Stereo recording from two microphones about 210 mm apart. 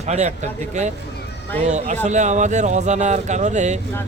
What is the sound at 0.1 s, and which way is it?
Speech, 30° right (ahead or behind).